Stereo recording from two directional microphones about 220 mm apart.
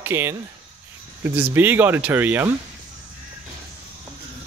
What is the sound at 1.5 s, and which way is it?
Speech, 10° right (ahead or behind).